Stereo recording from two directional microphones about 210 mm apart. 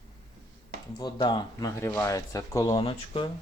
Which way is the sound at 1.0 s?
20° left (ahead or behind).